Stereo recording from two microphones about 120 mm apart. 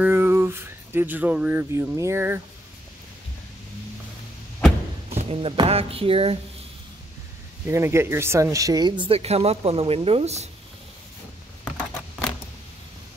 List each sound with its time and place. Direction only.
0.0 s speech: 20° right (ahead or behind)
5.1 s a sound: 55° right (ahead or behind)
5.7 s speech: 55° right (ahead or behind)
7.6 s speech: 20° right (ahead or behind)
9.0 s a woman's voice: 55° right (ahead or behind)